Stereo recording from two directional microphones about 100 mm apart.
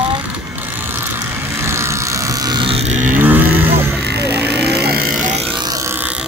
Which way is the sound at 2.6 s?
85° right.